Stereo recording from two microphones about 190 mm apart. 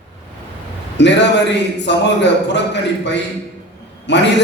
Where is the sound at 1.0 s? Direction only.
65° left (ahead or behind).